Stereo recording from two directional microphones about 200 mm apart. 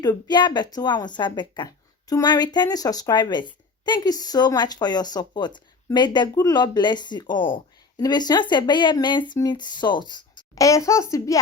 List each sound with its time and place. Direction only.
0.0 s speech: 20° left (ahead or behind)